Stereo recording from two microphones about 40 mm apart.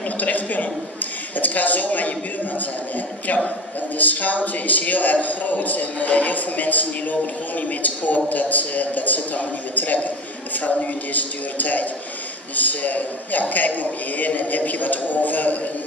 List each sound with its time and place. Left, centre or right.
0.2 s a man's voice: left
4.0 s a man's voice: left